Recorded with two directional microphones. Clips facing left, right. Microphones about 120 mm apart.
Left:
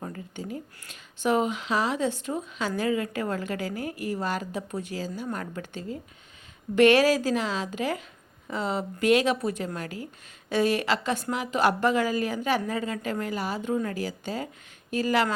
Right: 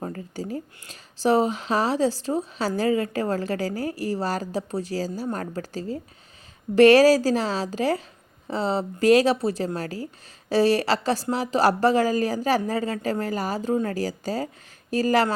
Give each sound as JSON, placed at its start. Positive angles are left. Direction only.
{"t": 0.0, "sound": "speech", "side_deg": -35}